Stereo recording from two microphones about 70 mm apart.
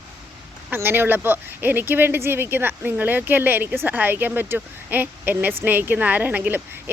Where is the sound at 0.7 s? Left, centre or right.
Right.